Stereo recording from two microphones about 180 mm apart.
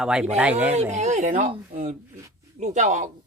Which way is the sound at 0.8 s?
40° right (ahead or behind).